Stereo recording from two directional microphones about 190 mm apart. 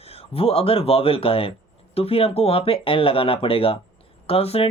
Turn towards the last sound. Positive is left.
turn(degrees=30)  # may be behind; listen again after turning